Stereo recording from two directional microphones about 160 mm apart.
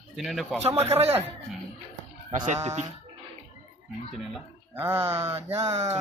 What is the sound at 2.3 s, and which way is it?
Speech, 45° right (ahead or behind).